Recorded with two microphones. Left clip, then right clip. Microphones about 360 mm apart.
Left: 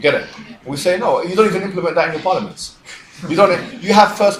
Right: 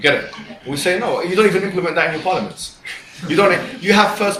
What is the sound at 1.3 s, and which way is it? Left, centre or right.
A man's voice, centre.